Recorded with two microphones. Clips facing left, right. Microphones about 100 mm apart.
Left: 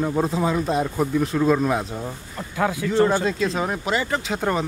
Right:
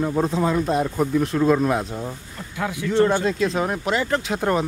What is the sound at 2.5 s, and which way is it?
Speech, 40° left (ahead or behind).